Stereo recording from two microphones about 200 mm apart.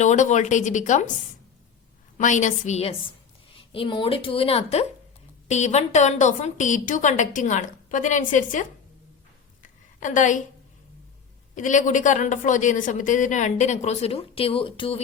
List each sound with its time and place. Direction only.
0.0 s a woman's voice: 35° left (ahead or behind)
2.1 s a woman's voice: 40° left (ahead or behind)
9.6 s a sound: 40° left (ahead or behind)
11.5 s a woman's voice: 40° left (ahead or behind)